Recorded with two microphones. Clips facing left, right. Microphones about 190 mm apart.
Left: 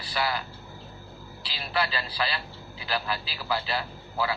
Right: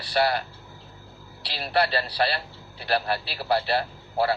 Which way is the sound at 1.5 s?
65° right (ahead or behind).